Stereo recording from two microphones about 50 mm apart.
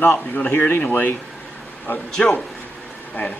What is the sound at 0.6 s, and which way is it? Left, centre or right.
Speech, left.